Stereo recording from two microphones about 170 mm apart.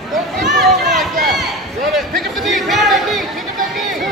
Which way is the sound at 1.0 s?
Centre (ahead or behind).